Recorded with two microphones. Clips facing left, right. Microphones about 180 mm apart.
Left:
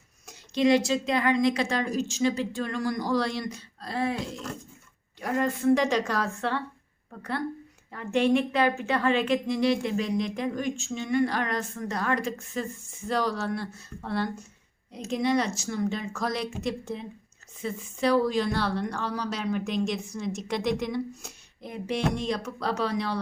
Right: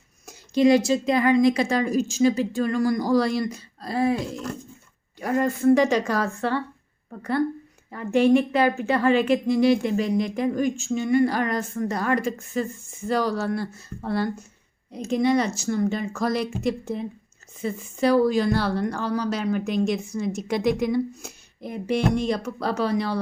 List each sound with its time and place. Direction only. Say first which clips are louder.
0.3 s a woman's voice: right 4 dB; 5° right (ahead or behind)
5.2 s a woman's voice: right 4 dB; centre (ahead or behind)